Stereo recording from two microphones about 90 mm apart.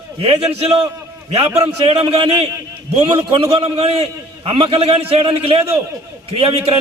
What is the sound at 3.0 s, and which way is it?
A man's voice, 80° right.